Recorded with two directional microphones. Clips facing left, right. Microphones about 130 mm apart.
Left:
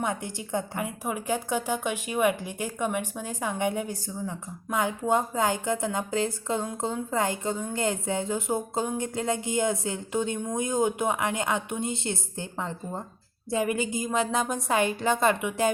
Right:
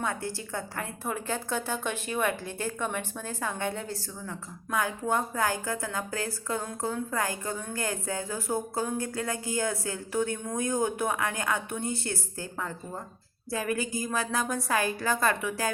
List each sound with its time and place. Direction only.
0.0 s a woman's voice: 20° left (ahead or behind)